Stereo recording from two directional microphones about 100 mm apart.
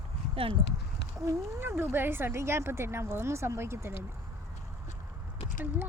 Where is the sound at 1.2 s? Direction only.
25° right (ahead or behind).